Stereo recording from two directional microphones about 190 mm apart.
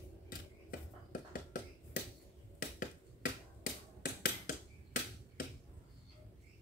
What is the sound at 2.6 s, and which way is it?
Finger snapping, 45° left (ahead or behind).